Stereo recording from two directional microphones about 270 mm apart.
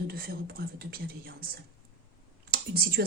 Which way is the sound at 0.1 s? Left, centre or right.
Right.